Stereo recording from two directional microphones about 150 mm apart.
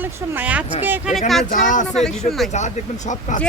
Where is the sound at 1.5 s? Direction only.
60° left (ahead or behind).